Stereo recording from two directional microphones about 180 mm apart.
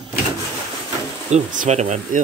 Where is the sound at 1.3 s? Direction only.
40° right (ahead or behind).